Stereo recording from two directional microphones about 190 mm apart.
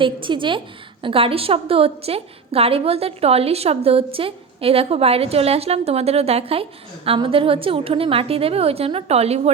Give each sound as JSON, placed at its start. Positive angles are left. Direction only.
{"t": 0.0, "sound": "a woman's voice", "side_deg": -25}